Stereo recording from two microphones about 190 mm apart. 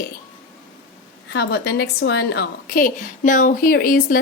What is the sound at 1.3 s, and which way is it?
A woman's voice, 60° left (ahead or behind).